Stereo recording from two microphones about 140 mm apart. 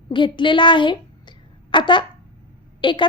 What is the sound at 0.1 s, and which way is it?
A woman's voice, 35° left (ahead or behind).